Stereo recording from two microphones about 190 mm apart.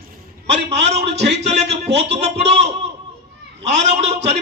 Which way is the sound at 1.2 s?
35° right (ahead or behind).